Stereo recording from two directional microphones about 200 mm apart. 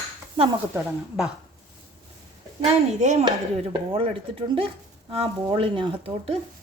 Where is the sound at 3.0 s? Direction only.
35° right (ahead or behind).